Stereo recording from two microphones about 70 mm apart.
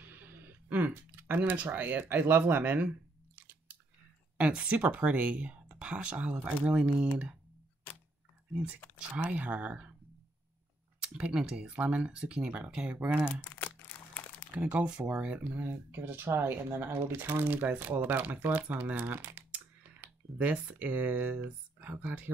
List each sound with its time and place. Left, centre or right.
0.0 s speech: right
4.4 s speech: centre
9.1 s speech: right
11.0 s speech: centre
13.4 s crumpling: left
14.5 s speech: centre